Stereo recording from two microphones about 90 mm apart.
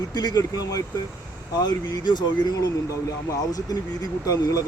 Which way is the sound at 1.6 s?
55° left (ahead or behind).